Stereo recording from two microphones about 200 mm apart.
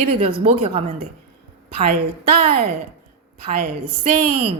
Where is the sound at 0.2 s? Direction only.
25° right (ahead or behind).